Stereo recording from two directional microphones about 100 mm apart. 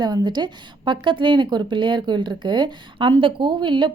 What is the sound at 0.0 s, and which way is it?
A woman's voice, 45° right (ahead or behind).